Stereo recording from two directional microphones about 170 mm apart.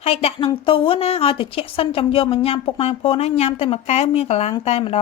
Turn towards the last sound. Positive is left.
turn(degrees=35)  # may be behind; listen again after turning